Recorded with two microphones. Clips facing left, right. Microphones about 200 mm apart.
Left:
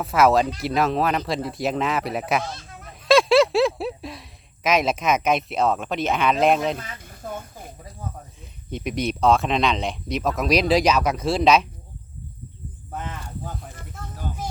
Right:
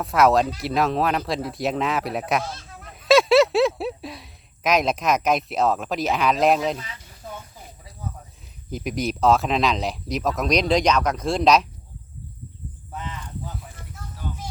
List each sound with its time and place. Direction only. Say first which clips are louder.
0.0 s speech: even; centre (ahead or behind)
6.7 s snake: left 2 dB; 50° left (ahead or behind)
8.7 s speech: even; centre (ahead or behind)
12.9 s a sound: left 2 dB; 50° left (ahead or behind)